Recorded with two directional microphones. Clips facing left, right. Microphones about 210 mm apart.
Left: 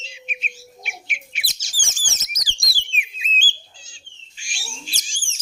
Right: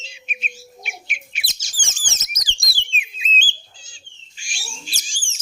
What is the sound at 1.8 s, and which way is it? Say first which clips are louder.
Bird: right 1 dB; 20° right (ahead or behind).